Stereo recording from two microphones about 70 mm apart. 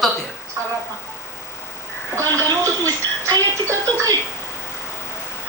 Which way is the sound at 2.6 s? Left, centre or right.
Right.